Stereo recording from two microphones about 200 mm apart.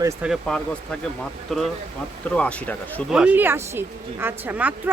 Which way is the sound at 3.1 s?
5° right (ahead or behind).